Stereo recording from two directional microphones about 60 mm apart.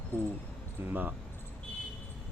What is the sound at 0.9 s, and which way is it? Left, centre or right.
Speech, right.